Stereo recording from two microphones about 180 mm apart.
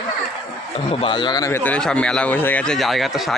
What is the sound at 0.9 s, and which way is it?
A man's voice, 30° left (ahead or behind).